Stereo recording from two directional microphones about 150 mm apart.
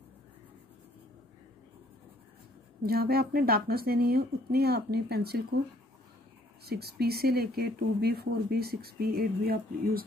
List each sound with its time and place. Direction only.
2.8 s speech: 90° right
6.6 s speech: 90° right